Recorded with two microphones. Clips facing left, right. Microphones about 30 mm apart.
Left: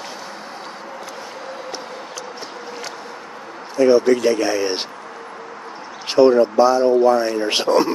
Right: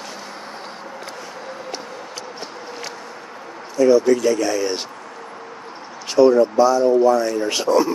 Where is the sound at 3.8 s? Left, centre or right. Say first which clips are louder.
Left 1 dB; left.